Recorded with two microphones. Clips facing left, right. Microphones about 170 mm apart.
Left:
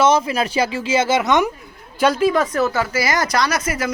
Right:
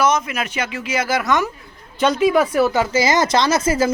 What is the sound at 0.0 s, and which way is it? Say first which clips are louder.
Speech: left 3 dB; 30° left (ahead or behind).